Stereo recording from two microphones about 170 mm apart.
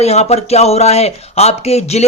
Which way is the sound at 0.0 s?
40° left (ahead or behind).